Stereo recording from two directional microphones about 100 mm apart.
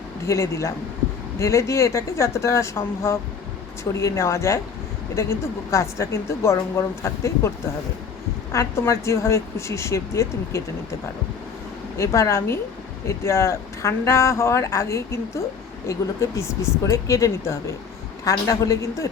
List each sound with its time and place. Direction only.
0.3 s a woman's voice: 30° left (ahead or behind)
8.5 s a woman's voice: 30° left (ahead or behind)
11.9 s a woman's voice: 30° left (ahead or behind)